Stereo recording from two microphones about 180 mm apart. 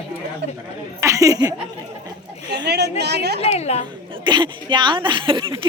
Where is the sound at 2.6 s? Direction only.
65° right (ahead or behind).